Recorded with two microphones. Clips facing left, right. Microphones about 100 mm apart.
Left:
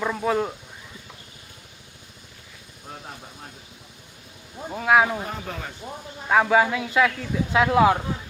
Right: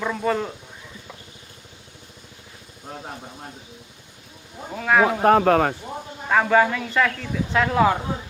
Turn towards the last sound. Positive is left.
turn(degrees=10)  # may be behind; listen again after turning